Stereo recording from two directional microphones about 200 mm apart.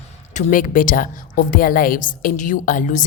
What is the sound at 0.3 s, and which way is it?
A woman's voice, 40° left (ahead or behind).